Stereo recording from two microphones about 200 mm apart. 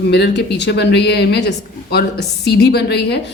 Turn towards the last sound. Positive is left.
turn(degrees=55)  # may be behind; listen again after turning